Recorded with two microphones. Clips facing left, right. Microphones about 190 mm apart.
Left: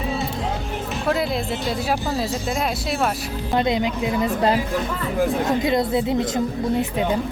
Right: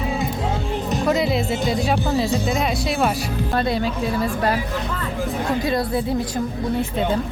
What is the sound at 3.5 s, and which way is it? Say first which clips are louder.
A woman's voice: left 2 dB; 20° left (ahead or behind).